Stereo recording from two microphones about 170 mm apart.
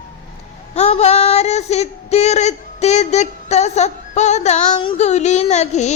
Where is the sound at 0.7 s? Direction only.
40° left (ahead or behind).